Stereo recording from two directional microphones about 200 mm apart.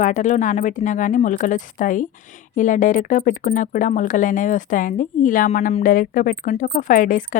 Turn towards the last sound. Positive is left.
turn(degrees=40)  # may be behind; listen again after turning